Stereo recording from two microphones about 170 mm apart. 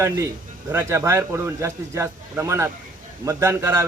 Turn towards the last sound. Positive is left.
turn(degrees=-15)  # may be behind; listen again after turning